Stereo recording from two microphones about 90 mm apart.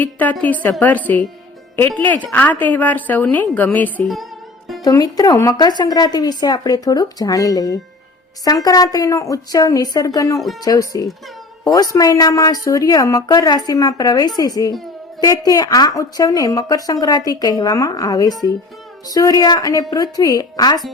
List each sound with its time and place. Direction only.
0.0 s speech: 20° left (ahead or behind)
4.0 s a woman's voice: centre (ahead or behind)
4.8 s a woman's voice: 45° left (ahead or behind)
10.3 s a woman's voice: centre (ahead or behind)
10.6 s speech: 40° left (ahead or behind)
13.2 s a woman's voice: 50° left (ahead or behind)